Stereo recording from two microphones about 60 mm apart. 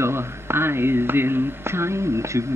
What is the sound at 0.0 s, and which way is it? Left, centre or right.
Speech, right.